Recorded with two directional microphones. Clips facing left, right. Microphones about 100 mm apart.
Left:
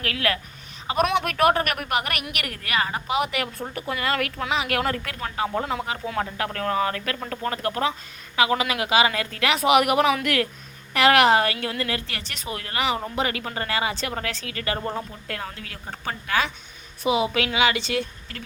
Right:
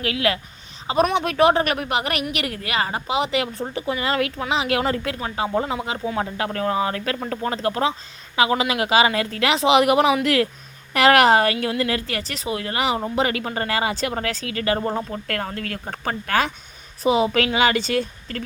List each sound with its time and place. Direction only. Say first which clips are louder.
0.0 s speech: right 3 dB; 20° right (ahead or behind)
4.8 s speech: right 3 dB; 15° right (ahead or behind)
6.9 s a woman's voice: right 4 dB; 30° right (ahead or behind)
12.5 s a woman's voice: right 3 dB; 25° right (ahead or behind)
15.1 s a woman's voice: right 6 dB; 60° right (ahead or behind); by 18.4 s 45° right (ahead or behind)